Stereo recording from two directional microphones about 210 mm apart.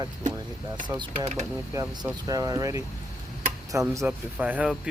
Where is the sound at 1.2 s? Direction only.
35° right (ahead or behind).